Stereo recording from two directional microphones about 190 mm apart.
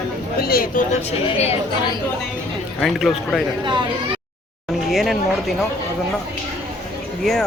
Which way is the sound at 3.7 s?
25° right (ahead or behind).